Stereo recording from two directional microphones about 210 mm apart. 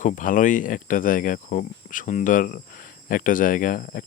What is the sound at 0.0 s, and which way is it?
Speech, 40° left (ahead or behind).